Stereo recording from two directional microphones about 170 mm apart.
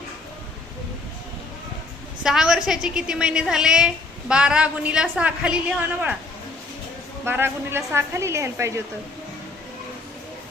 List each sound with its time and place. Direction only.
2.2 s a woman's voice: 5° right (ahead or behind)
7.3 s a woman's voice: 15° right (ahead or behind)